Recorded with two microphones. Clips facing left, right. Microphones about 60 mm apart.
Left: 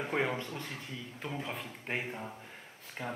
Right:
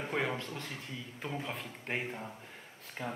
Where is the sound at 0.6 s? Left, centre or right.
Centre.